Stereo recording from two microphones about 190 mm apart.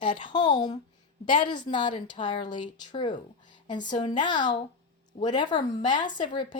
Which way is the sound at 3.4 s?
25° left (ahead or behind).